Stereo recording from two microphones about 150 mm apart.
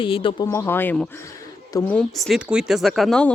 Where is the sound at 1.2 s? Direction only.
20° left (ahead or behind).